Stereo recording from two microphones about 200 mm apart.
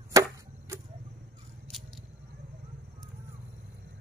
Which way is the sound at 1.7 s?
Centre (ahead or behind).